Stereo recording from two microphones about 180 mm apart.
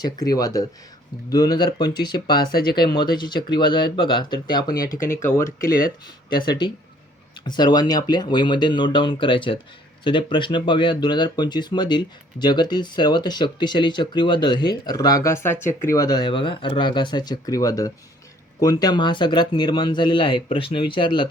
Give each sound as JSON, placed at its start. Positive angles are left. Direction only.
{"t": 0.0, "sound": "speech", "side_deg": 20}
{"t": 5.6, "sound": "speech", "side_deg": 55}
{"t": 6.3, "sound": "speech", "side_deg": 25}